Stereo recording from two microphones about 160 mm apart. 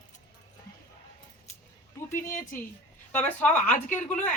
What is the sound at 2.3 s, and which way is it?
Speech, 55° left (ahead or behind).